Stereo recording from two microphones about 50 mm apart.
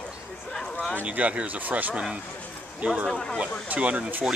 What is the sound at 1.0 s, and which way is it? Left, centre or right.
Speech, right.